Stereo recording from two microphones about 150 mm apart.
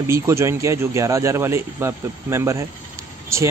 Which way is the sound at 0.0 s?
20° right (ahead or behind).